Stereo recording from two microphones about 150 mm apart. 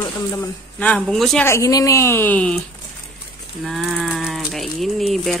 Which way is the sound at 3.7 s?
Centre (ahead or behind).